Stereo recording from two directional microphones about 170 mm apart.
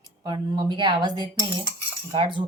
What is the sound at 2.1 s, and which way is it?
Speech, 30° right (ahead or behind).